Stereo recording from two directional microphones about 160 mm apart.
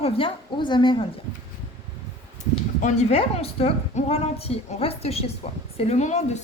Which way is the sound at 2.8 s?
40° left (ahead or behind).